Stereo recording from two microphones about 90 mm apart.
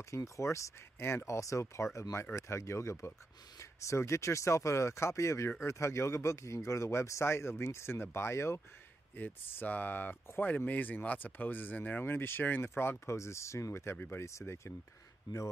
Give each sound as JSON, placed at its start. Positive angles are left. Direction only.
{"t": 0.1, "sound": "speech", "side_deg": 35}